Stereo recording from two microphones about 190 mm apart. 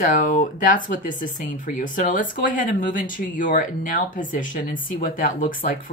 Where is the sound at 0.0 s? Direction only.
45° left (ahead or behind).